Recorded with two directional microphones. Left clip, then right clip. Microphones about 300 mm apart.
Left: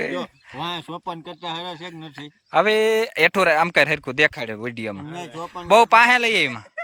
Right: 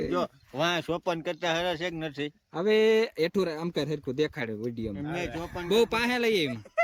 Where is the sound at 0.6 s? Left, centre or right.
Right.